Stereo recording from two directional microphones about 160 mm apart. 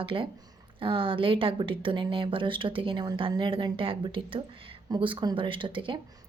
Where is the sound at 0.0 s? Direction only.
35° right (ahead or behind).